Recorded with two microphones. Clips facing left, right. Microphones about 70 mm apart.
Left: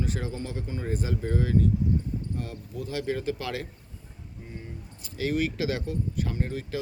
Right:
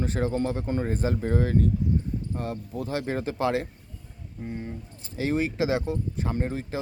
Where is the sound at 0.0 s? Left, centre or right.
Right.